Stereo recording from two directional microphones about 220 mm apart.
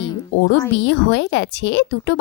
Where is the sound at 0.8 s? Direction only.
55° left (ahead or behind).